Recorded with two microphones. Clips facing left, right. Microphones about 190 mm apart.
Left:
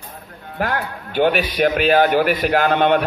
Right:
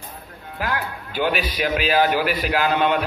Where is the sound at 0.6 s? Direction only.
55° left (ahead or behind).